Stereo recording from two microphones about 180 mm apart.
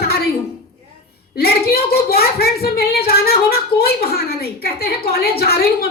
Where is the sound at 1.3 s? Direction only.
60° left (ahead or behind).